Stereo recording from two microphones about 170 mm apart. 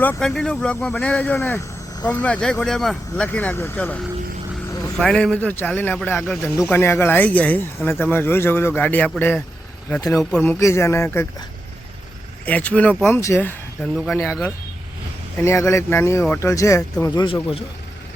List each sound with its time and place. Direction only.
0.0 s speech: 5° left (ahead or behind)
6.6 s speech: 15° left (ahead or behind)
12.5 s speech: 10° left (ahead or behind)
15.4 s speech: 15° left (ahead or behind)